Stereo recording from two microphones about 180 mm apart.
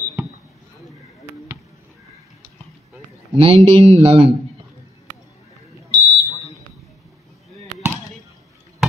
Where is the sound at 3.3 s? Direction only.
30° right (ahead or behind).